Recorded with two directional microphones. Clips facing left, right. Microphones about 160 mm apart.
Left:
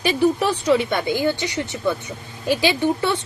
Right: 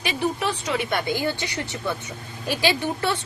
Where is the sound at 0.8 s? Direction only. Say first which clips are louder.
Left 3 dB; 20° left (ahead or behind).